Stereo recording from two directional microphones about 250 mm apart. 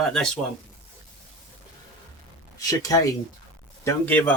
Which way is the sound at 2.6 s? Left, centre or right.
Centre.